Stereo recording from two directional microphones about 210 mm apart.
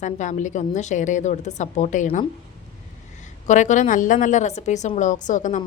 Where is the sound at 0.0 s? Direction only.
35° left (ahead or behind).